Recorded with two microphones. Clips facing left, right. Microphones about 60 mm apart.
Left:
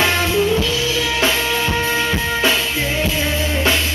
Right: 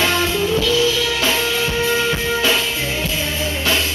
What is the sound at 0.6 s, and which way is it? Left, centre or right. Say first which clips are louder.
Music: right 2 dB; left.